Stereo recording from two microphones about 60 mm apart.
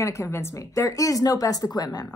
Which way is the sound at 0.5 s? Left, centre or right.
Left.